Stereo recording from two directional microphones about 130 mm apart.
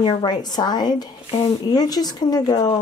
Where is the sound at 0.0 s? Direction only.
35° left (ahead or behind).